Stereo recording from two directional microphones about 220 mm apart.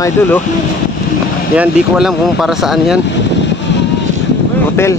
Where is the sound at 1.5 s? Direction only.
5° right (ahead or behind).